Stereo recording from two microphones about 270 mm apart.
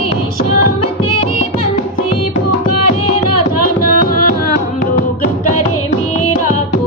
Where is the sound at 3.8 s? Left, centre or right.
Left.